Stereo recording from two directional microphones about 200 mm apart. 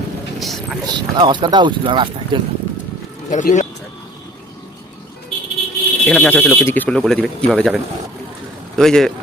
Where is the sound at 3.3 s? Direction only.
35° left (ahead or behind).